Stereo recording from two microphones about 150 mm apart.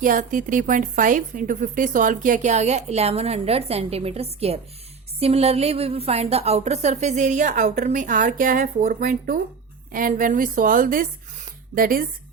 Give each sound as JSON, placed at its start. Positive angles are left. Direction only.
{"t": 0.0, "sound": "a woman's voice", "side_deg": -60}